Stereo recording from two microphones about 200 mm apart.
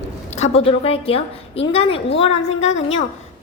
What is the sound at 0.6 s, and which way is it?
A woman's voice, 30° left (ahead or behind).